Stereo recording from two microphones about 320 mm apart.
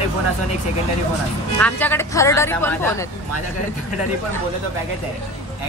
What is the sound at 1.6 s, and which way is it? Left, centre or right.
Speech, centre.